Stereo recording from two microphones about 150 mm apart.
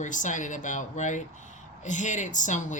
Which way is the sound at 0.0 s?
55° left (ahead or behind).